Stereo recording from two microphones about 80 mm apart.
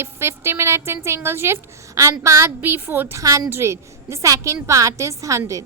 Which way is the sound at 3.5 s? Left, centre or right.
Right.